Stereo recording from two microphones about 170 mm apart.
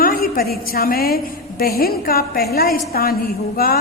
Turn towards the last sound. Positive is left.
turn(degrees=60)  # may be behind; listen again after turning